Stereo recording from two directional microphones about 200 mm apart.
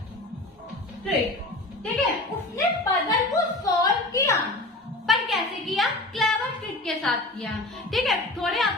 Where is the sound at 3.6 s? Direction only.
15° left (ahead or behind).